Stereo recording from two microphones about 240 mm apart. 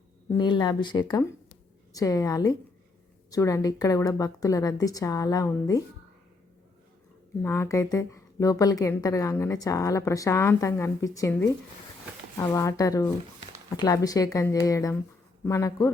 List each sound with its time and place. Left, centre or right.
0.3 s speech: centre
7.4 s speech: centre